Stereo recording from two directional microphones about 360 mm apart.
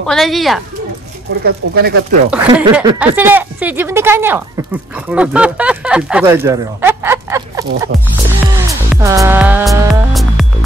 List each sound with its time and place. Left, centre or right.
0.0 s music: centre
1.4 s speech: right
2.3 s speech: centre
9.0 s music: centre